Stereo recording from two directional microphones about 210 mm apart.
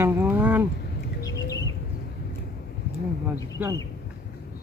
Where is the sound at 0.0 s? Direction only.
10° right (ahead or behind).